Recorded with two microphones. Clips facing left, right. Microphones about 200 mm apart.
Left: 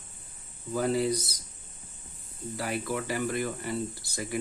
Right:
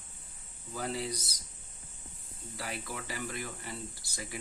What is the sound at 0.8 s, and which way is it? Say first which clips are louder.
Speech: left 9 dB; 55° left (ahead or behind).